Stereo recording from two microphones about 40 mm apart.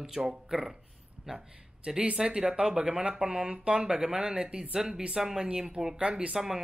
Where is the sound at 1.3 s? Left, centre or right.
Right.